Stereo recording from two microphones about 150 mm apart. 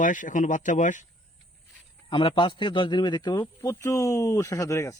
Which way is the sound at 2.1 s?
35° left (ahead or behind).